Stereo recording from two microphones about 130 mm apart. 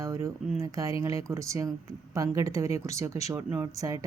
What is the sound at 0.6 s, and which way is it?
Speech, 25° right (ahead or behind).